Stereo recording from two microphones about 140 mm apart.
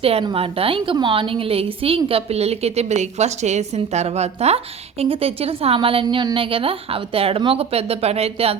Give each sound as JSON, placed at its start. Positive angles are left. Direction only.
{"t": 0.0, "sound": "a woman's voice", "side_deg": -45}